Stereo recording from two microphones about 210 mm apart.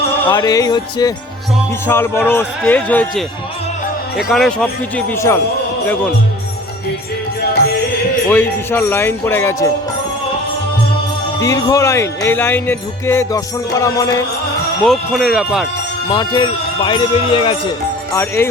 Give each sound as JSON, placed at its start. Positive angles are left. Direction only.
{"t": 0.3, "sound": "speech", "side_deg": 15}
{"t": 8.3, "sound": "speech", "side_deg": 10}
{"t": 11.3, "sound": "speech", "side_deg": 15}
{"t": 14.8, "sound": "speech", "side_deg": 0}
{"t": 16.0, "sound": "speech", "side_deg": 20}
{"t": 18.1, "sound": "speech", "side_deg": 10}